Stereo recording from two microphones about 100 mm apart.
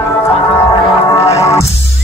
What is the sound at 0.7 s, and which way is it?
Music, 30° left (ahead or behind).